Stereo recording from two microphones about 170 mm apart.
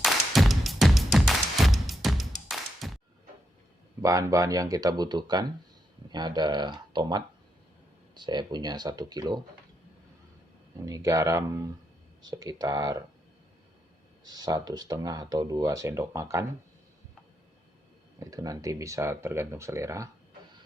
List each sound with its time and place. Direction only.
0.0 s music: centre (ahead or behind)
4.0 s speech: 20° right (ahead or behind)
10.8 s speech: 20° right (ahead or behind)
14.3 s speech: 25° right (ahead or behind)
18.2 s speech: 20° right (ahead or behind)